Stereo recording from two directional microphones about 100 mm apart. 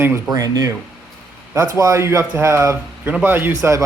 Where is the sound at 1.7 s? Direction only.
30° right (ahead or behind).